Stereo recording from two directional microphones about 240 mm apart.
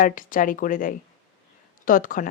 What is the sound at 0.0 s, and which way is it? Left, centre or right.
Speech, left.